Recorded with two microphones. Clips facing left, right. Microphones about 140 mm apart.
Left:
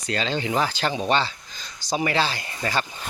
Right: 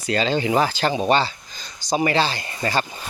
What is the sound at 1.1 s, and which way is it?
Speech, 40° right (ahead or behind).